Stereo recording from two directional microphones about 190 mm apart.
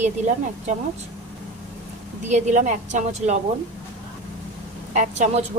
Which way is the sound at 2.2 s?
40° right (ahead or behind).